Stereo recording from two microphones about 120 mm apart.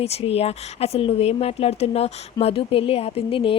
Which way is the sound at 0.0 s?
60° left (ahead or behind).